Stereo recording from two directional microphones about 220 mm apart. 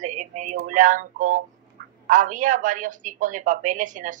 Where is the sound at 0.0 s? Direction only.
35° right (ahead or behind).